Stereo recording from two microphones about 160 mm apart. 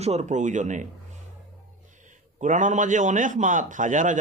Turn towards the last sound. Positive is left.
turn(degrees=-50)  # may be behind; listen again after turning